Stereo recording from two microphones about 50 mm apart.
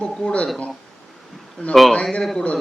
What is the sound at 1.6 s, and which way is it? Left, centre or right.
Speech, left.